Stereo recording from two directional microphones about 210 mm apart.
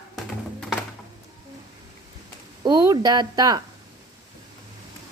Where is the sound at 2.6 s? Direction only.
15° right (ahead or behind).